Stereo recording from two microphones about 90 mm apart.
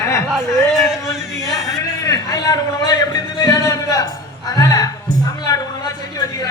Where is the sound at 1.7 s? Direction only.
35° left (ahead or behind).